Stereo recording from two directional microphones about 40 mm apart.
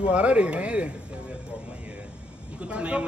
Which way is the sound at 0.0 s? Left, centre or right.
Right.